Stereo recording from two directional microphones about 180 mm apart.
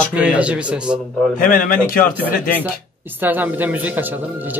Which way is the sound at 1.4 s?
50° left (ahead or behind).